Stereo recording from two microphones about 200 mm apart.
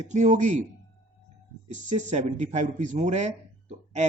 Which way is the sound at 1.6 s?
35° right (ahead or behind).